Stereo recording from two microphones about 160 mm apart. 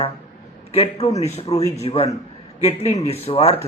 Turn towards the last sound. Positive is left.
turn(degrees=40)  # may be behind; listen again after turning